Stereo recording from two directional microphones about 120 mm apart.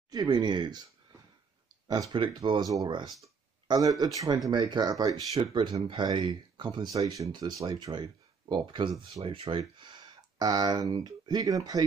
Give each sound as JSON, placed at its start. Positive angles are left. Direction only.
{"t": 0.1, "sound": "speech", "side_deg": -35}
{"t": 1.9, "sound": "speech", "side_deg": -35}